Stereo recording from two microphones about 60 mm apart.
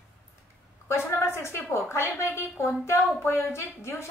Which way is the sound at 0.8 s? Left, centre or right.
Left.